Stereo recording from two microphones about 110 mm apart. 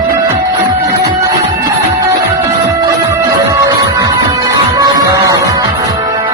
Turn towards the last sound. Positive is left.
turn(degrees=-30)  # may be behind; listen again after turning